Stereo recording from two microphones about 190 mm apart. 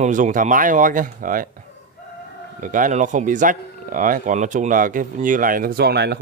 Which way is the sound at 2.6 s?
45° right (ahead or behind).